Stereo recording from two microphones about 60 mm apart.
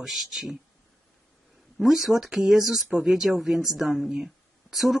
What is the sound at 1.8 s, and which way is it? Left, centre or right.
Speech, centre.